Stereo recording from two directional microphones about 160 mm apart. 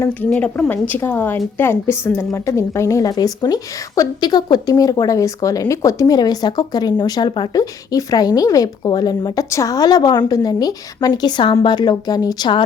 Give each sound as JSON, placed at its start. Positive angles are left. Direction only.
{"t": 0.0, "sound": "a woman's voice", "side_deg": 10}